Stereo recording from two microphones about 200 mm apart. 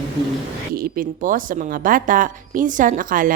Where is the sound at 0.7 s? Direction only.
45° right (ahead or behind).